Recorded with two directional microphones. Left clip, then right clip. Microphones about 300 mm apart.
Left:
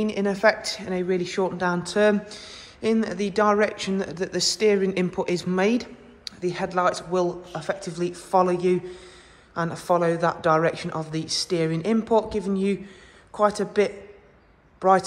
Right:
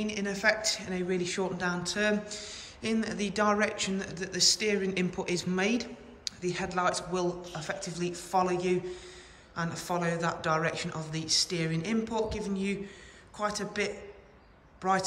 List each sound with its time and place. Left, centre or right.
0.0 s a man's voice: centre